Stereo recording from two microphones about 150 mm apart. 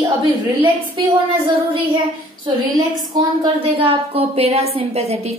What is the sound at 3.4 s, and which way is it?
A woman's voice, 35° right (ahead or behind).